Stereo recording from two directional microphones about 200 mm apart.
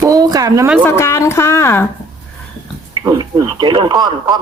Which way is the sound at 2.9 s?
20° right (ahead or behind).